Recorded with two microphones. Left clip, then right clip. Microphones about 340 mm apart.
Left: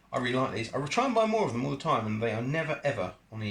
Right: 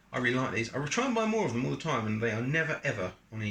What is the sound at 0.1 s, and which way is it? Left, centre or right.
Speech, centre.